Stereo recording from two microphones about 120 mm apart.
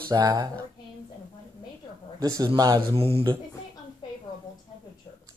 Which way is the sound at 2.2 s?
30° right (ahead or behind).